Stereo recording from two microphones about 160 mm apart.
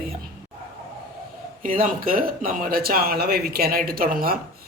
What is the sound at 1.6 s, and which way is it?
Speech, 60° right (ahead or behind).